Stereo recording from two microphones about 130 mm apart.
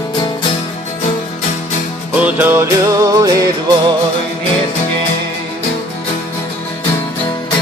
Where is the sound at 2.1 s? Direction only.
10° right (ahead or behind).